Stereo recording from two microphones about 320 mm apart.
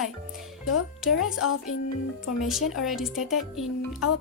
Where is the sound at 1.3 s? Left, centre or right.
Left.